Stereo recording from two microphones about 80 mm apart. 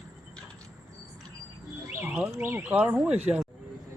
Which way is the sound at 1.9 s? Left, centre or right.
Right.